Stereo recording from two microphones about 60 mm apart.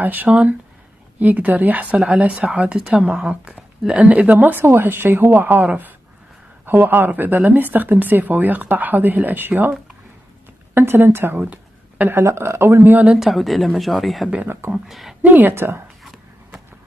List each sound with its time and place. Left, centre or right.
0.0 s speech: right
2.8 s speech: centre
3.1 s a woman's voice: right
13.2 s a woman's voice: centre
15.2 s speech: right
15.5 s speech: right